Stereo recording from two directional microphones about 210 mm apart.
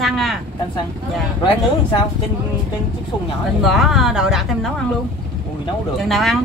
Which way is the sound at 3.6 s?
Centre (ahead or behind).